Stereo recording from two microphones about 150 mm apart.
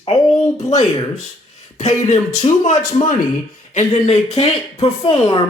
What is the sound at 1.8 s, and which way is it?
Speech, 50° left (ahead or behind).